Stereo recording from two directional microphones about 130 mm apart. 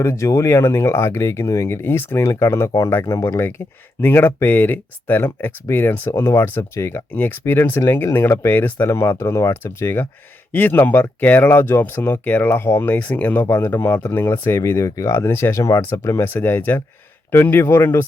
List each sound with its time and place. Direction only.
0.0 s speech: 20° left (ahead or behind)